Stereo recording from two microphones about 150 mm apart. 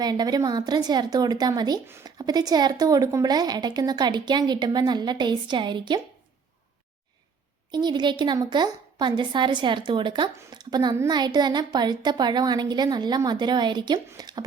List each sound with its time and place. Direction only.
0.0 s a woman's voice: 25° right (ahead or behind)
7.7 s a woman's voice: 30° right (ahead or behind)